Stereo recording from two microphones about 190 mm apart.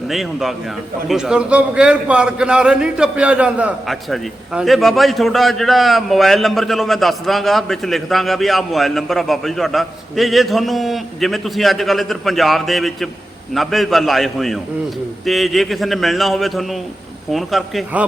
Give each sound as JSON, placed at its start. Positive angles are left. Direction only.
{"t": 0.1, "sound": "a man's voice", "side_deg": 0}